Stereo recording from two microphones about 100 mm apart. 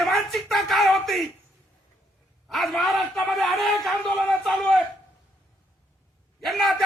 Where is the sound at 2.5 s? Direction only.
Centre (ahead or behind).